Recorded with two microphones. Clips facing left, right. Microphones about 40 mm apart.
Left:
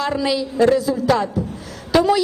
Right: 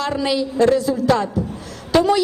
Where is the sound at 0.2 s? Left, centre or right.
Centre.